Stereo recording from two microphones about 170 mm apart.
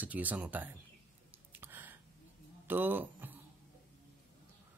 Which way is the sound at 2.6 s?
10° right (ahead or behind).